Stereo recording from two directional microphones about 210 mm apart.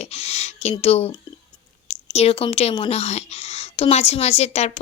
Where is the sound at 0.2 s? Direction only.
30° left (ahead or behind).